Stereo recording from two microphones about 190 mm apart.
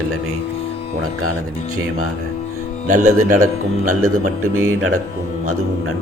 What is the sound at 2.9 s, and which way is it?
Speech, 40° right (ahead or behind).